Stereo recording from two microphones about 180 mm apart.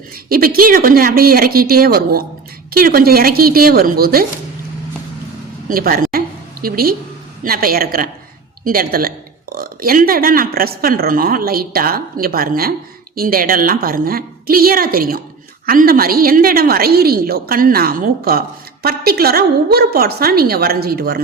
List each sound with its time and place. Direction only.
0.3 s a woman's voice: 55° right (ahead or behind)
5.6 s a sound: 55° right (ahead or behind)
7.4 s a woman's voice: 55° right (ahead or behind)